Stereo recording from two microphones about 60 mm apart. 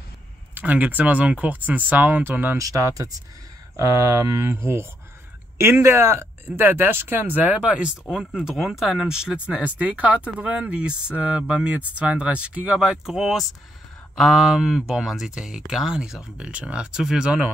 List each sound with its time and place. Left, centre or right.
0.6 s speech: right
2.5 s speech: right
7.6 s speech: centre
9.6 s speech: right